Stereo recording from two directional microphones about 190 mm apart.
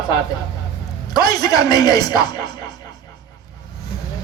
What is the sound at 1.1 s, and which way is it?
A man's voice, 20° left (ahead or behind).